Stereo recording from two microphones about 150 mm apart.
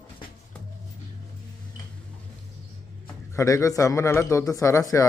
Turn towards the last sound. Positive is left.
turn(degrees=20)  # may be behind; listen again after turning